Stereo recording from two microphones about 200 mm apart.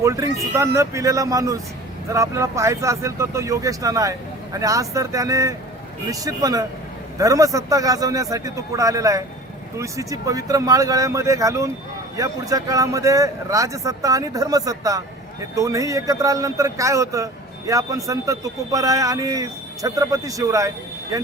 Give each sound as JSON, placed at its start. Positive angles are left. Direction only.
{"t": 0.0, "sound": "a man's voice", "side_deg": -15}